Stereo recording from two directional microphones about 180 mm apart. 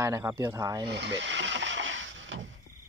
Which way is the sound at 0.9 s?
75° right (ahead or behind).